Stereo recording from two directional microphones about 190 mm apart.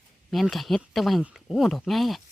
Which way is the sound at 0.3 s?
Centre (ahead or behind).